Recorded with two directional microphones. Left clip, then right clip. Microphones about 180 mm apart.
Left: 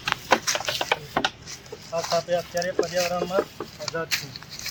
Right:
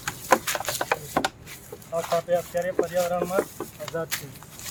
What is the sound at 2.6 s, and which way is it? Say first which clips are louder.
Speech: even; 10° right (ahead or behind).